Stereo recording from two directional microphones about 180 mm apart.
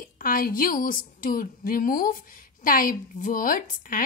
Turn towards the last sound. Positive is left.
turn(degrees=50)  # may be behind; listen again after turning